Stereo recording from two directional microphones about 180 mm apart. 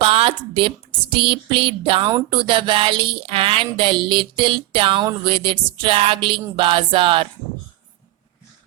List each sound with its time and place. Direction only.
0.0 s a woman's voice: 30° right (ahead or behind)